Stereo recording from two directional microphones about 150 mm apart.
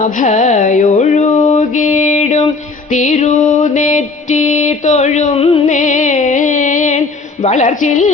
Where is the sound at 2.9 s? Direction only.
55° left (ahead or behind).